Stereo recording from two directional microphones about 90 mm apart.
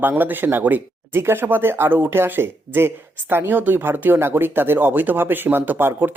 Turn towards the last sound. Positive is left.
turn(degrees=-25)  # may be behind; listen again after turning